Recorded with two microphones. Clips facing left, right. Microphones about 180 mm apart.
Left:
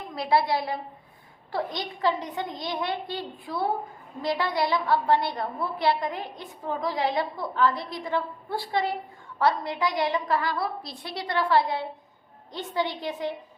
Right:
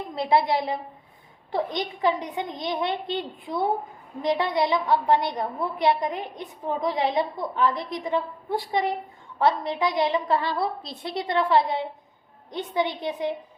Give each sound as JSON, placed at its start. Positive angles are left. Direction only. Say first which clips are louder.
{"t": 0.1, "sound": "a woman's voice", "louder": "right 2 dB", "side_deg": -20}